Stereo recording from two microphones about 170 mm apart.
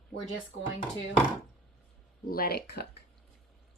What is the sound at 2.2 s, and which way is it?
Speech, 60° left (ahead or behind).